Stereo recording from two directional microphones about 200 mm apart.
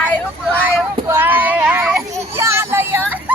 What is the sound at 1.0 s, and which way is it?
Child singing, 10° right (ahead or behind).